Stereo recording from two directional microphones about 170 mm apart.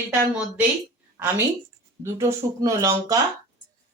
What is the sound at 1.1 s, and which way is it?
A woman's voice, 20° right (ahead or behind).